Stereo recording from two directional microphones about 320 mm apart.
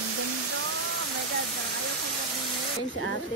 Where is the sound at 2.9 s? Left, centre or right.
Left.